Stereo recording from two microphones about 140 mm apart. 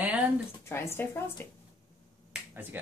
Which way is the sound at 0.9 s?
15° left (ahead or behind).